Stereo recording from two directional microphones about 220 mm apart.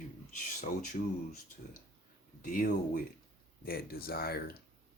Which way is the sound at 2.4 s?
40° left (ahead or behind).